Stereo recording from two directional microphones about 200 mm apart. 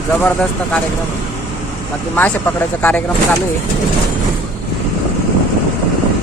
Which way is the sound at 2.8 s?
5° left (ahead or behind).